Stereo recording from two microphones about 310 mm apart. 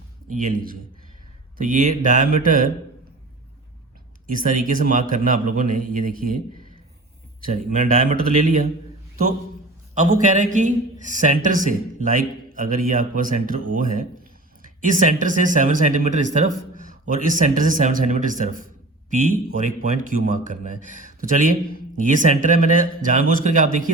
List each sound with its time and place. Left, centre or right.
0.3 s speech: right
4.3 s speech: right
7.4 s speech: right
9.9 s speech: right